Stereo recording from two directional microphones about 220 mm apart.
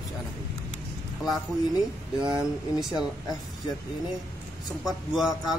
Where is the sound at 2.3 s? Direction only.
Centre (ahead or behind).